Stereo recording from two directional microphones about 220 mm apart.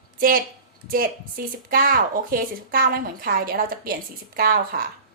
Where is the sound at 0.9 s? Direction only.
40° right (ahead or behind).